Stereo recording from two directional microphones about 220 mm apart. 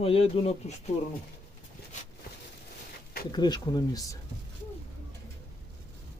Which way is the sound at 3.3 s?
20° left (ahead or behind).